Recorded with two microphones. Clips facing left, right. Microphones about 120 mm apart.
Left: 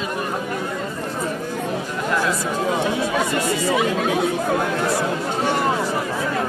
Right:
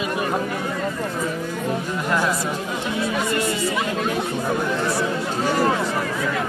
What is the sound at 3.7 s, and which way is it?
Speech, 90° left.